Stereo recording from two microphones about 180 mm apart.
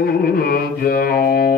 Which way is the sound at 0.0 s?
55° left (ahead or behind).